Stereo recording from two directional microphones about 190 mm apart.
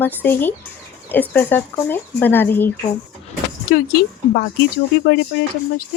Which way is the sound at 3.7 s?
55° left (ahead or behind).